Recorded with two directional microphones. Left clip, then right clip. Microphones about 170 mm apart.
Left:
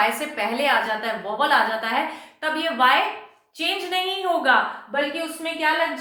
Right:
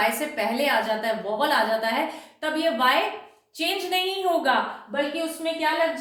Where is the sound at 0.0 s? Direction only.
10° right (ahead or behind).